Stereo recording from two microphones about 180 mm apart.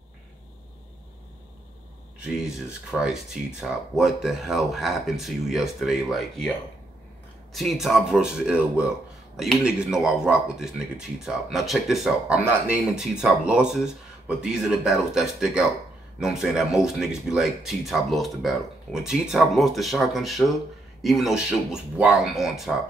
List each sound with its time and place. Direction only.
2.4 s speech: 5° right (ahead or behind)
7.5 s speech: centre (ahead or behind)